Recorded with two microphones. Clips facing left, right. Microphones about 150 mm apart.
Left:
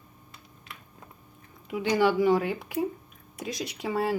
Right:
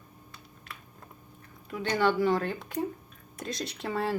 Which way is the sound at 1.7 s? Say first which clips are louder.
Left 3 dB; 10° left (ahead or behind).